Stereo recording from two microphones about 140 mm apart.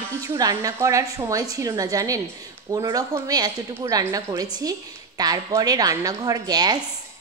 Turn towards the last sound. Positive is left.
turn(degrees=-30)  # may be behind; listen again after turning